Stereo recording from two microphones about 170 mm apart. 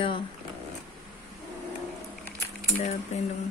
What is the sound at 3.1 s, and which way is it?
Speech, 40° left (ahead or behind).